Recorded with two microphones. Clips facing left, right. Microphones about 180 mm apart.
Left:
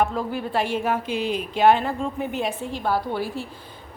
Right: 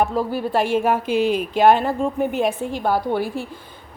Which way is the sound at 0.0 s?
35° right (ahead or behind).